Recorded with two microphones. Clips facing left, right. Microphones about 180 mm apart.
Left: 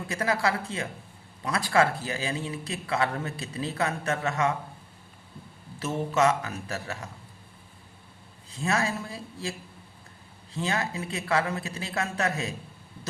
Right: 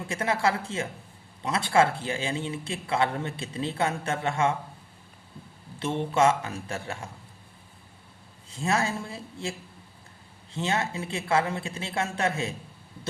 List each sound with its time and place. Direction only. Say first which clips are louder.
0.1 s a man's voice: right 1 dB; 25° right (ahead or behind)
5.8 s a man's voice: right 1 dB; 30° right (ahead or behind)
8.4 s a man's voice: right 1 dB; 30° right (ahead or behind)